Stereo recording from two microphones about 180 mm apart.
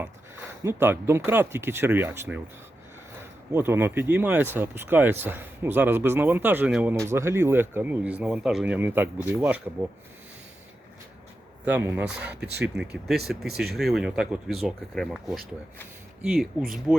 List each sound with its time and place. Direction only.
0.6 s speech: 15° right (ahead or behind)
3.5 s speech: 10° right (ahead or behind)
11.6 s speech: 10° right (ahead or behind)
12.3 s speech: 65° right (ahead or behind)
13.1 s speech: centre (ahead or behind)